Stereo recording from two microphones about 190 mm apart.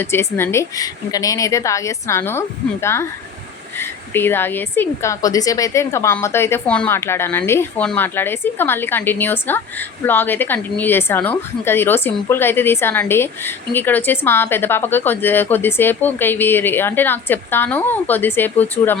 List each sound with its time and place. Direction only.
0.0 s speech: 10° left (ahead or behind)